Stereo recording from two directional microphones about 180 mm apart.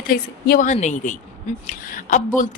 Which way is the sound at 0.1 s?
55° left (ahead or behind).